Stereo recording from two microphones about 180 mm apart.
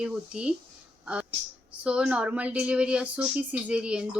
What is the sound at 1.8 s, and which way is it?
A woman's voice, 5° right (ahead or behind).